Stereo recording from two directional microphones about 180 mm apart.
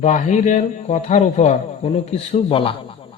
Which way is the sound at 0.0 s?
40° left (ahead or behind).